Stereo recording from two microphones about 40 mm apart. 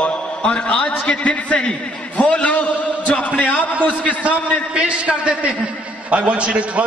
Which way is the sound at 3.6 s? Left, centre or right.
Left.